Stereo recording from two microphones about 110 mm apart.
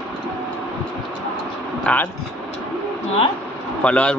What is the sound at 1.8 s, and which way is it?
Speech, 15° left (ahead or behind).